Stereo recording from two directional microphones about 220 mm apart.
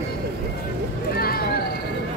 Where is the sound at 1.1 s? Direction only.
45° left (ahead or behind).